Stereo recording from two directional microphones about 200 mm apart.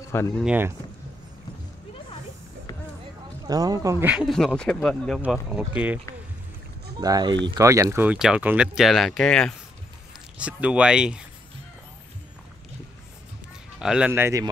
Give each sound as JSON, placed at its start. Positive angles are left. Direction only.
{"t": 0.4, "sound": "speech", "side_deg": -10}
{"t": 3.4, "sound": "speech", "side_deg": -15}
{"t": 7.0, "sound": "speech", "side_deg": -20}
{"t": 13.7, "sound": "speech", "side_deg": -5}